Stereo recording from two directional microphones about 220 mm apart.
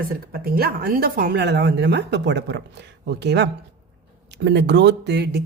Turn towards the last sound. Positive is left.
turn(degrees=-50)  # may be behind; listen again after turning